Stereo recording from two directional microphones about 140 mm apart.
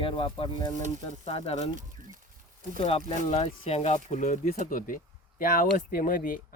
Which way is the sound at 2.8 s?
45° left (ahead or behind).